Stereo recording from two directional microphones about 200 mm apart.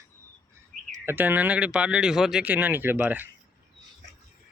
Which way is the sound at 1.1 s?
10° right (ahead or behind).